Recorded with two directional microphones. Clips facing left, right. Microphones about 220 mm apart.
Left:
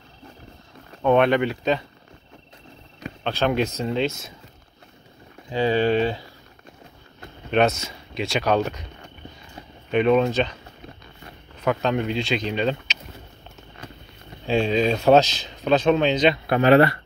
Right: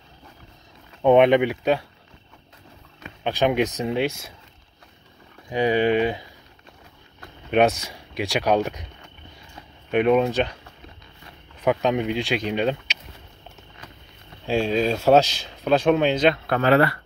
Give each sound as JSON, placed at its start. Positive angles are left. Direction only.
{"t": 1.0, "sound": "speech", "side_deg": -15}
{"t": 3.3, "sound": "speech", "side_deg": -15}
{"t": 5.5, "sound": "speech", "side_deg": -15}
{"t": 7.5, "sound": "speech", "side_deg": -15}
{"t": 9.8, "sound": "speech", "side_deg": -10}
{"t": 11.6, "sound": "speech", "side_deg": -15}
{"t": 14.5, "sound": "speech", "side_deg": -5}
{"t": 16.4, "sound": "speech", "side_deg": 15}